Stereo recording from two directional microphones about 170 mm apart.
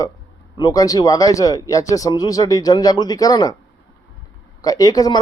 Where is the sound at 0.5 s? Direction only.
20° left (ahead or behind).